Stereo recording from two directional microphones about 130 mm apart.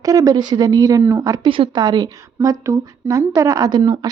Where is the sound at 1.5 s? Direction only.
40° right (ahead or behind).